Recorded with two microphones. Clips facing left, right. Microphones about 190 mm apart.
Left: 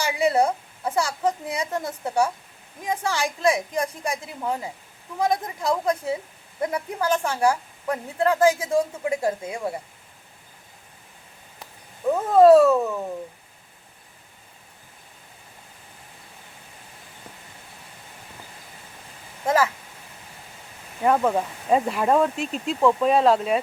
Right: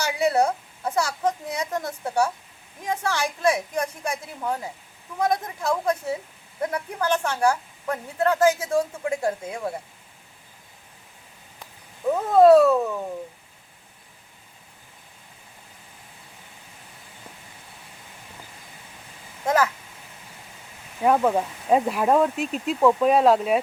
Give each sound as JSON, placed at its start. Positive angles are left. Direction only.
{"t": 0.0, "sound": "a woman's voice", "side_deg": 10}
{"t": 12.1, "sound": "speech", "side_deg": 0}
{"t": 19.5, "sound": "speech", "side_deg": 5}
{"t": 21.0, "sound": "speech", "side_deg": -5}